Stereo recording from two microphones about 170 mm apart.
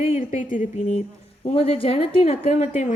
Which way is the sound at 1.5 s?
35° left (ahead or behind).